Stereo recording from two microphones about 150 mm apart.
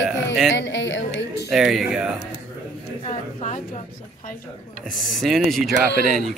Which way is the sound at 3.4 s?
55° left (ahead or behind).